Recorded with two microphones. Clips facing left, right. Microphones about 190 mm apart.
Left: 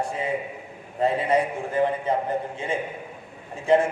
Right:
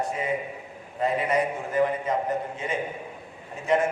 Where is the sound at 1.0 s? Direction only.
30° left (ahead or behind).